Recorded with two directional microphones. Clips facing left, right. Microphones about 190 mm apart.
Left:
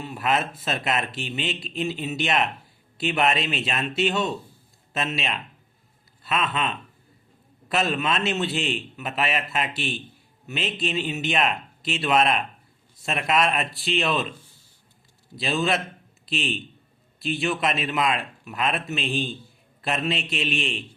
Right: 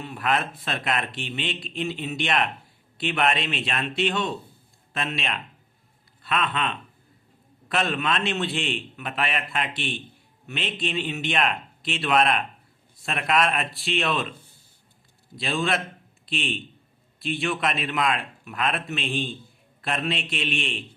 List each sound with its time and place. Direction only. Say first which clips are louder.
0.0 s a man's voice: left 1 dB; 5° left (ahead or behind)
15.4 s a man's voice: left 2 dB; centre (ahead or behind)